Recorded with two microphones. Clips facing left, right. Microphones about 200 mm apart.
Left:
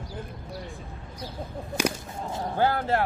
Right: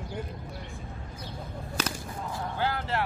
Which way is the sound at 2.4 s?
50° left (ahead or behind).